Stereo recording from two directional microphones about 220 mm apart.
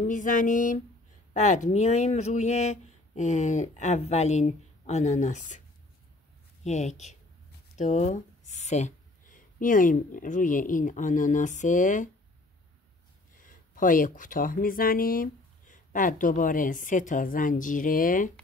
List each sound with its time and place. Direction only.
0.0 s speech: 35° left (ahead or behind)
6.6 s speech: 30° left (ahead or behind)
13.4 s speech: 40° left (ahead or behind)